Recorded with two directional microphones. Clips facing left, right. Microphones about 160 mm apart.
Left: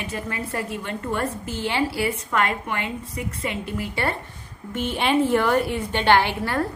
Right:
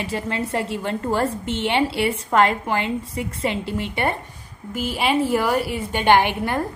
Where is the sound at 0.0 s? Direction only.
30° right (ahead or behind).